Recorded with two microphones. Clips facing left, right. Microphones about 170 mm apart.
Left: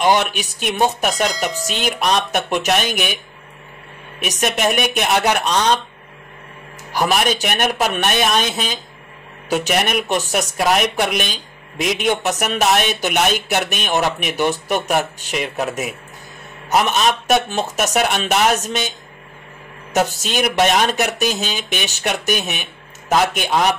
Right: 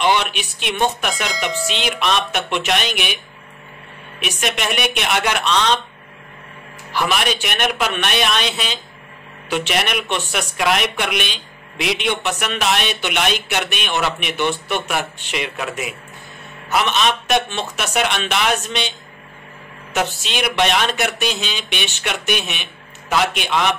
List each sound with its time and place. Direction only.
0.0 s speech: 45° left (ahead or behind)
4.2 s speech: 45° left (ahead or behind)
6.9 s speech: 40° left (ahead or behind)
19.9 s speech: 40° left (ahead or behind)